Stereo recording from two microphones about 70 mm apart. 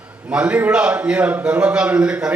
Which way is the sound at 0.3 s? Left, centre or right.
Centre.